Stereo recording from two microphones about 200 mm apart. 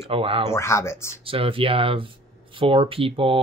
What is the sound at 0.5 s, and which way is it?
Speech, 15° left (ahead or behind).